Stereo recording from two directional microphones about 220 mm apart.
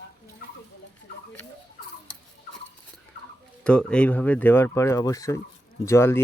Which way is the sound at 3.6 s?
5° left (ahead or behind).